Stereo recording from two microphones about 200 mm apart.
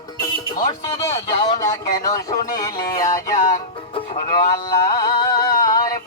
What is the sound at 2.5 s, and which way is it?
Music, 20° left (ahead or behind).